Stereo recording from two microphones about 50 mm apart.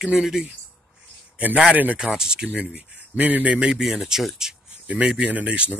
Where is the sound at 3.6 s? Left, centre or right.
Centre.